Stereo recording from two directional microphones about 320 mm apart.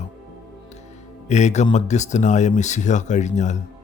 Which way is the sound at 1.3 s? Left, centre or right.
Left.